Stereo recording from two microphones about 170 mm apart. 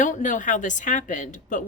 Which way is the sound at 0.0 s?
50° left (ahead or behind).